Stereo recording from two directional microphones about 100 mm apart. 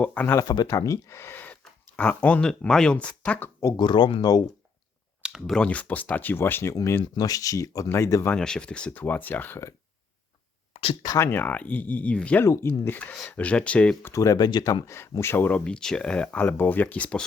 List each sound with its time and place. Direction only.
0.0 s speech: 15° left (ahead or behind)
0.4 s speech: 45° left (ahead or behind)
0.7 s speech: 30° left (ahead or behind); by 3.5 s 15° left (ahead or behind)
3.8 s speech: 50° left (ahead or behind)
5.2 s a sound: 5° right (ahead or behind)
5.5 s speech: 10° left (ahead or behind)
7.0 s speech: 40° left (ahead or behind)
8.4 s speech: 5° left (ahead or behind)
11.0 s speech: 40° left (ahead or behind)
11.3 s speech: 20° left (ahead or behind)
12.5 s speech: 25° left (ahead or behind)
14.0 s speech: 30° left (ahead or behind); by 17.2 s 10° left (ahead or behind)